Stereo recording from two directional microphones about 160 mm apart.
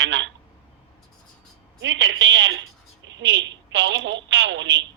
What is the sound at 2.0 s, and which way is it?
Speech, 90° right.